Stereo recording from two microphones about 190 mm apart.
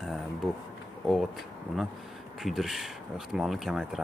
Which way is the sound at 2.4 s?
Centre (ahead or behind).